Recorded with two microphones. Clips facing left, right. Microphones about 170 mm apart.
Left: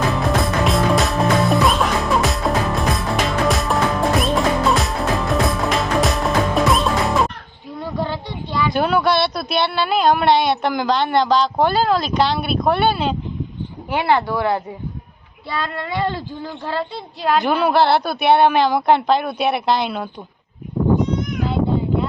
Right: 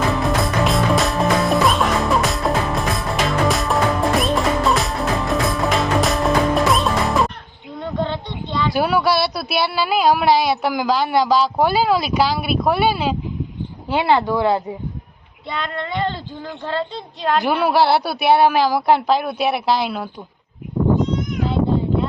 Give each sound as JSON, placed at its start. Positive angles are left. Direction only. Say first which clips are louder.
{"t": 0.2, "sound": "music", "louder": "even", "side_deg": 0}
{"t": 8.7, "sound": "speech", "louder": "even", "side_deg": -5}
{"t": 13.9, "sound": "speech", "louder": "right 1 dB", "side_deg": -15}
{"t": 17.3, "sound": "speech", "louder": "left 1 dB", "side_deg": 0}
{"t": 21.2, "sound": "a sound", "louder": "even", "side_deg": 0}